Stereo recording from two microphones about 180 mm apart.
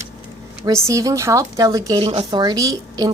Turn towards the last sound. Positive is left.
turn(degrees=-20)  # may be behind; listen again after turning